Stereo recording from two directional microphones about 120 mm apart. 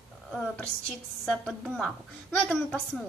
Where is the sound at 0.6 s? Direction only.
5° left (ahead or behind).